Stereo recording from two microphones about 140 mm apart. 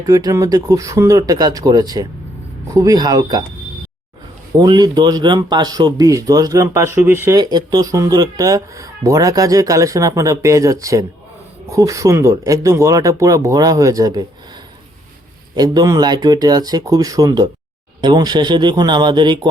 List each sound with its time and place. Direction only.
0.0 s speech: 25° right (ahead or behind)
4.5 s speech: 30° right (ahead or behind)
7.3 s speech: 25° right (ahead or behind)